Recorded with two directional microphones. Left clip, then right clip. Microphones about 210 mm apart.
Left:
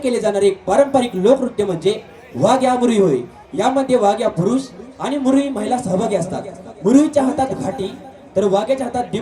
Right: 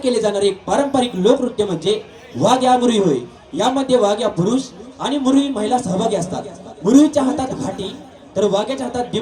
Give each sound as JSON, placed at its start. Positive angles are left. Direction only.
{"t": 0.0, "sound": "a man's voice", "side_deg": 55}